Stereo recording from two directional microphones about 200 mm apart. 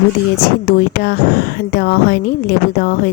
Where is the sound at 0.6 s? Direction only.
50° left (ahead or behind).